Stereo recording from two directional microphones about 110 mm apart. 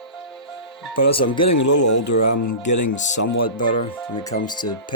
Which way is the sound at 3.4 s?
50° left (ahead or behind).